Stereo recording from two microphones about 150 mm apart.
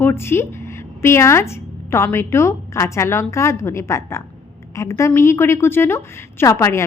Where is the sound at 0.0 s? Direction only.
15° left (ahead or behind).